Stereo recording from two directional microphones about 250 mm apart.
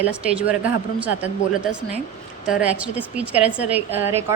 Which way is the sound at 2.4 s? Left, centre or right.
Centre.